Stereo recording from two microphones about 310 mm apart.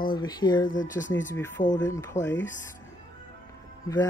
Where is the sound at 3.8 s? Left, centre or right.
Centre.